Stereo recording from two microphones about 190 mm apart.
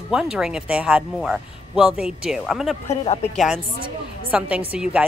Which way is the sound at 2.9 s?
35° left (ahead or behind).